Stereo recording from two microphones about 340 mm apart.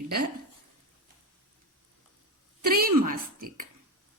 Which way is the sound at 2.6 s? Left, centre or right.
Right.